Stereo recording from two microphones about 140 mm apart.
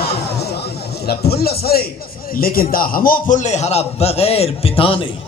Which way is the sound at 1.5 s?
90° left.